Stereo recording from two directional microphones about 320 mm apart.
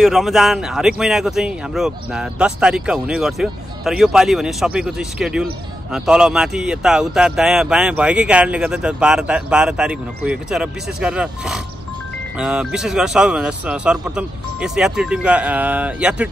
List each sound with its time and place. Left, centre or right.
0.0 s speech: centre